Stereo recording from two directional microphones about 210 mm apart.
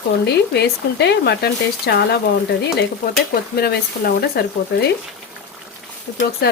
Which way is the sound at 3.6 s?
50° left (ahead or behind).